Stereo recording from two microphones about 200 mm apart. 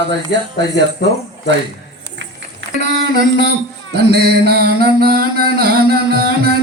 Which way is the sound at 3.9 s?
55° right (ahead or behind).